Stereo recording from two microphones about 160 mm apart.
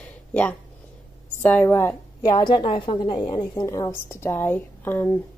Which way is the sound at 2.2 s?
30° left (ahead or behind).